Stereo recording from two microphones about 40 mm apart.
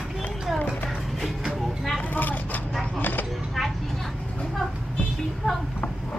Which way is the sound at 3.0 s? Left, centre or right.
Left.